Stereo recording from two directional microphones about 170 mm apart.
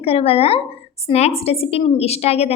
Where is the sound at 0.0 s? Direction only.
35° left (ahead or behind).